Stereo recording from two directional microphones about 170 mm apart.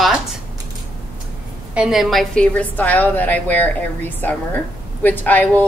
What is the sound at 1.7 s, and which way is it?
A woman's voice, 5° right (ahead or behind).